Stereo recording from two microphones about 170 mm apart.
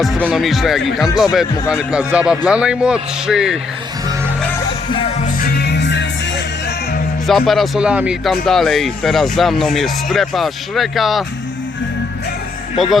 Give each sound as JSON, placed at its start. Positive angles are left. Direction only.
{"t": 0.0, "sound": "speech", "side_deg": 5}
{"t": 5.4, "sound": "music", "side_deg": 70}
{"t": 7.3, "sound": "speech", "side_deg": 0}
{"t": 12.7, "sound": "speech", "side_deg": 0}